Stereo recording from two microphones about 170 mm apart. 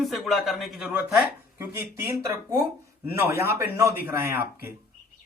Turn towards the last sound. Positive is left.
turn(degrees=-15)  # may be behind; listen again after turning